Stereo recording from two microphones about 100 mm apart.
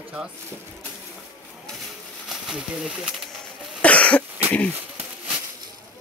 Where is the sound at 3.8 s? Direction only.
15° left (ahead or behind).